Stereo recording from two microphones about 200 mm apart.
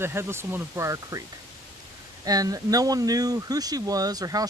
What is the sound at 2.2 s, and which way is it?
Speech, 15° right (ahead or behind).